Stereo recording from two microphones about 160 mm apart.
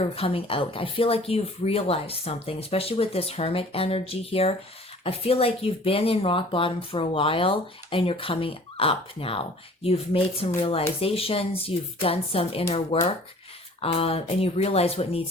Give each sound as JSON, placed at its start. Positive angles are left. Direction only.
{"t": 0.0, "sound": "speech", "side_deg": 35}